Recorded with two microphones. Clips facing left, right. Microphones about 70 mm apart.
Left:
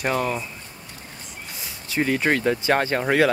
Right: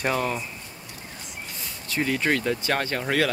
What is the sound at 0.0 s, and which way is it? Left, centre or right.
Speech, centre.